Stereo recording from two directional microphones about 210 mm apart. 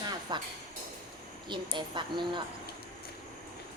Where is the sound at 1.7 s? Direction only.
20° right (ahead or behind).